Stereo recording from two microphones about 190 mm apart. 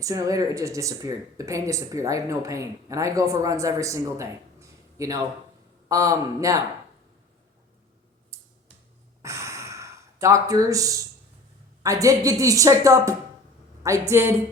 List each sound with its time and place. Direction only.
0.0 s speech: 15° right (ahead or behind)
8.3 s a sound: 15° right (ahead or behind)
9.2 s gasp: 15° right (ahead or behind)
11.8 s speech: 15° right (ahead or behind)